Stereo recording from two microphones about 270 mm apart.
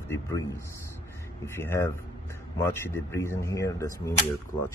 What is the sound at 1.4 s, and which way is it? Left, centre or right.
Speech, centre.